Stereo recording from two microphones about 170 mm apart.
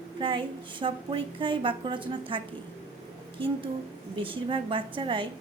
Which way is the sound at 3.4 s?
30° right (ahead or behind).